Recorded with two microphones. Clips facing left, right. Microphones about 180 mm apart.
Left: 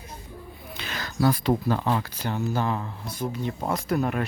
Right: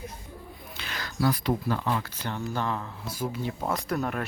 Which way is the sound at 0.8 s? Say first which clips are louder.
Left 3 dB; 25° left (ahead or behind).